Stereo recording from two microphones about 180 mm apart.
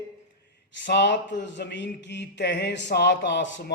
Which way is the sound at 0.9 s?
75° left (ahead or behind).